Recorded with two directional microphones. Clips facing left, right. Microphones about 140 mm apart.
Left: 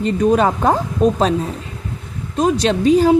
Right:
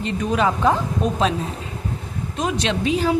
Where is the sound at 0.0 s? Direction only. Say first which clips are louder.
Left 6 dB; 40° left (ahead or behind).